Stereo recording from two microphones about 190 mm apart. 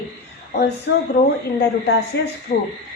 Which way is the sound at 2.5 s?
50° left (ahead or behind).